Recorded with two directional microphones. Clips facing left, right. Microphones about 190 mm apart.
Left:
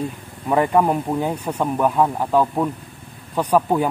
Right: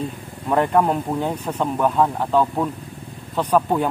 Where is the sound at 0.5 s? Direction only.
5° left (ahead or behind).